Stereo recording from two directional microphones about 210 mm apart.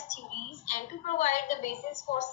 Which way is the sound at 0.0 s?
35° left (ahead or behind).